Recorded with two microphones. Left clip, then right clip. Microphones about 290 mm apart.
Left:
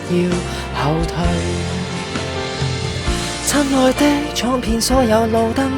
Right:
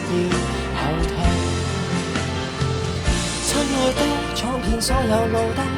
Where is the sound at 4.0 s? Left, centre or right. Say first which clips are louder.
Left 5 dB; left.